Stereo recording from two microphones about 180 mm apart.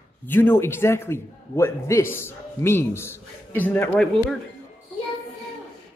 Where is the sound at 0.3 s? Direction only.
10° left (ahead or behind).